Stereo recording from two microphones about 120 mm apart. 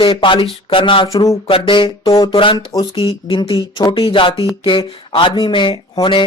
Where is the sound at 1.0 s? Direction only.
30° left (ahead or behind).